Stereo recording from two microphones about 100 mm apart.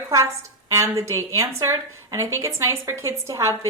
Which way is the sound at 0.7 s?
30° right (ahead or behind).